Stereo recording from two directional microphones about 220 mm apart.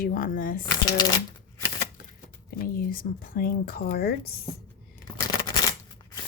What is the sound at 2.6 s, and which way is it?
Speech, 40° left (ahead or behind).